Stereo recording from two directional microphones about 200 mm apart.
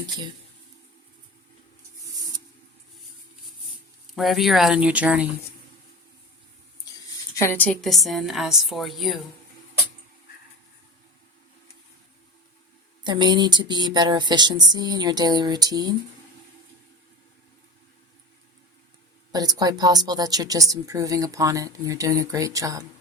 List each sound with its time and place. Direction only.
4.1 s a woman's voice: centre (ahead or behind)
7.3 s a woman's voice: 10° left (ahead or behind)
13.1 s a sound: 20° right (ahead or behind)
19.3 s speech: 20° right (ahead or behind)